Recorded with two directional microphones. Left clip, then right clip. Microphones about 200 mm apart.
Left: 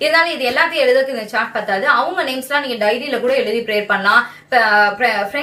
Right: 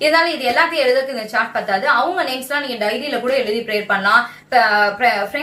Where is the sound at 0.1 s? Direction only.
20° left (ahead or behind).